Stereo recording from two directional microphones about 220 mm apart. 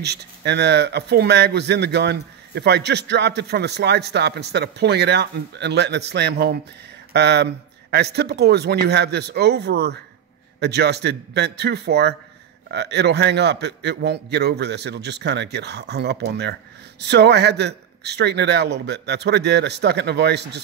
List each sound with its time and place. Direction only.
0.0 s speech: 50° right (ahead or behind)